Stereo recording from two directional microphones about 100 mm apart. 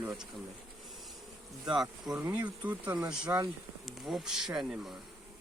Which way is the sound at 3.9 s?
Centre (ahead or behind).